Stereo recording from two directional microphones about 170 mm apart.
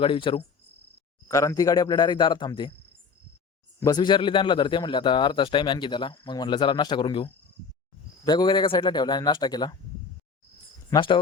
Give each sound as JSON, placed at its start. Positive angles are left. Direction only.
{"t": 0.0, "sound": "cricket", "side_deg": 30}
{"t": 1.3, "sound": "a man's voice", "side_deg": 20}
{"t": 3.8, "sound": "a man's voice", "side_deg": 25}
{"t": 10.9, "sound": "a man's voice", "side_deg": 30}